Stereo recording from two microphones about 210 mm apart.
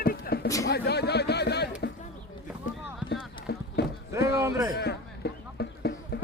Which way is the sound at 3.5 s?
50° left (ahead or behind).